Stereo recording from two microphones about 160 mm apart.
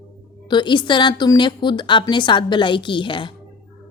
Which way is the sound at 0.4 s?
30° left (ahead or behind).